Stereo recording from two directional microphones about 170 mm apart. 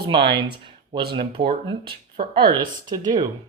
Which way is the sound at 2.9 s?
25° right (ahead or behind).